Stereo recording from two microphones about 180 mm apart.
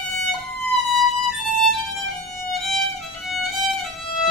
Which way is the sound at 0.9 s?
Centre (ahead or behind).